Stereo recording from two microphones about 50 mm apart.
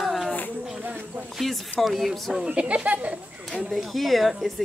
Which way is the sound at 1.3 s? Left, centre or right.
Centre.